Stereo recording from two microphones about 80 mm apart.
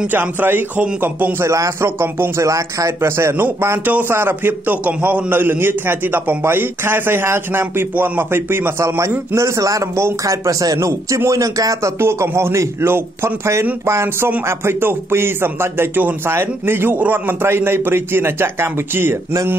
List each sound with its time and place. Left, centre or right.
0.1 s a man's voice: right
1.4 s speech: right
2.4 s a man's voice: right
12.0 s a man's voice: right